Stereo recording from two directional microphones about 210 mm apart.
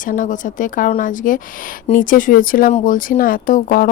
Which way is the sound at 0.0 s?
40° left (ahead or behind).